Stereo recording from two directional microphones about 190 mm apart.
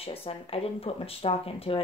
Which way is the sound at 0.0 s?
30° left (ahead or behind).